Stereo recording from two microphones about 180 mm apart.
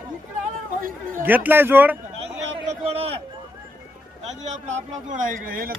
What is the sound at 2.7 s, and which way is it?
Speech, 35° right (ahead or behind).